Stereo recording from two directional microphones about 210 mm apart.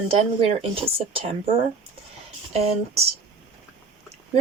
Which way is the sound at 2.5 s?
30° right (ahead or behind).